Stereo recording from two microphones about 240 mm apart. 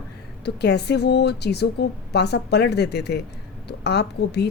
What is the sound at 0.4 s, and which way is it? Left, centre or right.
Speech, left.